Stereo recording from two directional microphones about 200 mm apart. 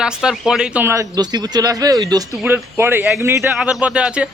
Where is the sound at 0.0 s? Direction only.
5° right (ahead or behind).